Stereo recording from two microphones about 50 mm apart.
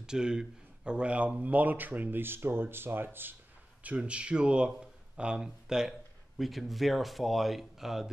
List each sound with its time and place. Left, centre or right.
0.0 s speech: centre; by 3.3 s right
4.0 s speech: right
6.3 s speech: centre